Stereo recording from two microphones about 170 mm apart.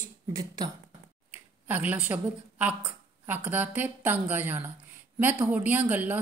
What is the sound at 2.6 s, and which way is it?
Speech, 10° right (ahead or behind).